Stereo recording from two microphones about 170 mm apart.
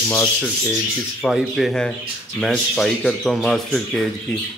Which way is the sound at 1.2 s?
Centre (ahead or behind).